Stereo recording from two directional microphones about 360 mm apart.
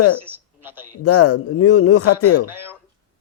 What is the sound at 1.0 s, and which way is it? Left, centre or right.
A man's voice, left.